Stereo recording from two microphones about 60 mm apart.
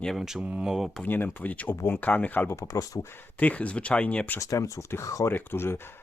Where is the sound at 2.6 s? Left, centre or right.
Left.